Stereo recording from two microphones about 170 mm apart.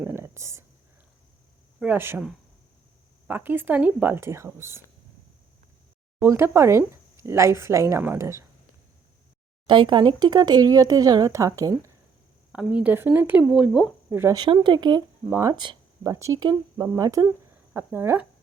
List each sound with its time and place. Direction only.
0.0 s whispering: 15° right (ahead or behind)
1.8 s speech: 10° right (ahead or behind)
6.1 s speech: 15° right (ahead or behind)
9.6 s speech: 25° right (ahead or behind)
12.5 s speech: 5° right (ahead or behind)
14.2 s speech: 15° right (ahead or behind)
14.4 s speech: 25° right (ahead or behind)
15.6 s a sound: 30° right (ahead or behind)
16.1 s speech: 20° right (ahead or behind)